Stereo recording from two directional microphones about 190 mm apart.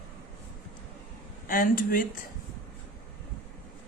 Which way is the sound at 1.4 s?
45° left (ahead or behind).